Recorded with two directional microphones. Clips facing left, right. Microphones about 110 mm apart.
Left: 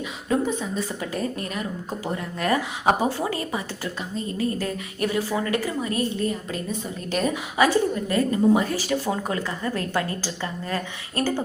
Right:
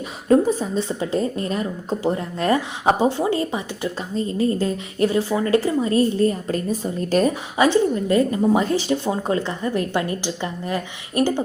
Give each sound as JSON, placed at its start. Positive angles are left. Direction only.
{"t": 0.3, "sound": "a woman's voice", "side_deg": -35}
{"t": 7.6, "sound": "a woman's voice", "side_deg": -25}